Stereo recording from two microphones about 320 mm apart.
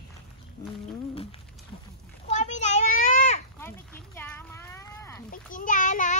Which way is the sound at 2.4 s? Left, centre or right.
Left.